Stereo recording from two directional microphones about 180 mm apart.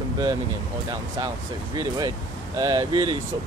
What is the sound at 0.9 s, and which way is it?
Speech, 25° right (ahead or behind).